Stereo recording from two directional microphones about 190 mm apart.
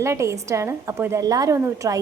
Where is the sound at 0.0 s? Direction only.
15° right (ahead or behind).